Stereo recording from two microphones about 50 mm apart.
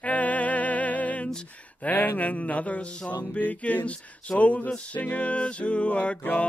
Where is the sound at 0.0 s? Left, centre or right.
Left.